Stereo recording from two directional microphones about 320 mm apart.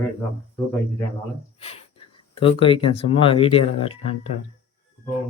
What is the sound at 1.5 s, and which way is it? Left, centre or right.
Speech, centre.